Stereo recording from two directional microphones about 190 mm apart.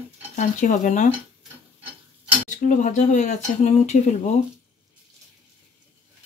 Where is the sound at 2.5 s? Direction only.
40° left (ahead or behind).